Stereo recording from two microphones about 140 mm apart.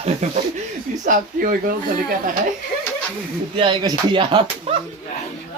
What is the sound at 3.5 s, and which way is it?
Speech, 35° right (ahead or behind).